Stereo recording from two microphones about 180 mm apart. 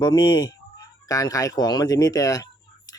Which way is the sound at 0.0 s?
20° left (ahead or behind).